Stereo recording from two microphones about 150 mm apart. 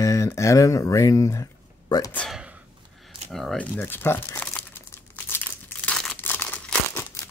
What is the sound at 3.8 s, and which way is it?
Crumpling, 15° left (ahead or behind).